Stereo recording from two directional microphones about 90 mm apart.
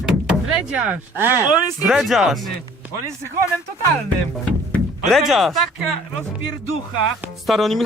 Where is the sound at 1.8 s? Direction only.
5° right (ahead or behind).